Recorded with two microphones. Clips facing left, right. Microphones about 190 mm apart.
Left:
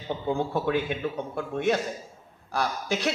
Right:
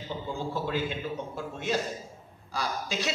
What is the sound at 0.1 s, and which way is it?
A man's voice, 60° left (ahead or behind).